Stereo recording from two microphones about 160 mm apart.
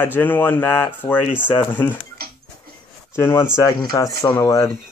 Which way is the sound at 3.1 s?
15° left (ahead or behind).